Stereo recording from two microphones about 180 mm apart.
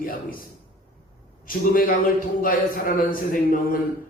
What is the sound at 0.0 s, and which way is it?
Speech, 50° left (ahead or behind).